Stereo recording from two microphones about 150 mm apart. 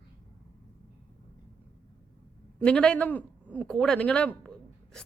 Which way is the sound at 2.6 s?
5° left (ahead or behind).